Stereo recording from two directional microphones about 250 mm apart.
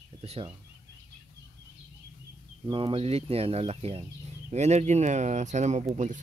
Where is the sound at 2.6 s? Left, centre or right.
Centre.